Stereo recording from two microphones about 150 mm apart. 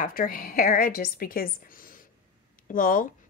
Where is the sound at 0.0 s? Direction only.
65° left (ahead or behind).